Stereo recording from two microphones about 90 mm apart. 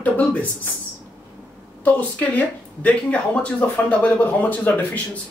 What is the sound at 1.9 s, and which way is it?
Speech, 15° left (ahead or behind).